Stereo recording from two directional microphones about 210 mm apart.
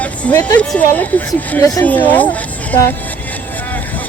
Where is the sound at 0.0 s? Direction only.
5° left (ahead or behind).